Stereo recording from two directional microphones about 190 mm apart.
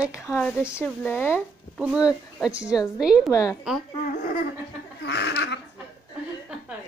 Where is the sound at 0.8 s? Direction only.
5° left (ahead or behind).